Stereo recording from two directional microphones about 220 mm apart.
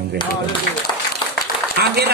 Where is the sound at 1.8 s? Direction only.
45° right (ahead or behind).